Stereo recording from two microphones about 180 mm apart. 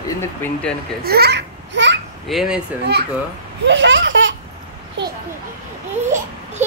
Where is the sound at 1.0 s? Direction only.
60° right (ahead or behind); by 1.9 s 75° right (ahead or behind).